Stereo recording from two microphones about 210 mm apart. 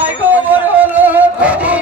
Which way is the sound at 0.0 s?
10° right (ahead or behind).